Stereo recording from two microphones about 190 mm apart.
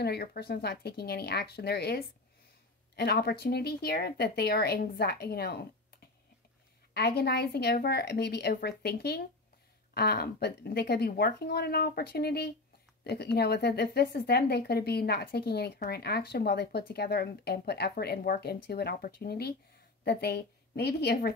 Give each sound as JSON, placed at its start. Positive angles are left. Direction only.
{"t": 0.0, "sound": "a woman's voice", "side_deg": 55}
{"t": 6.9, "sound": "a woman's voice", "side_deg": 55}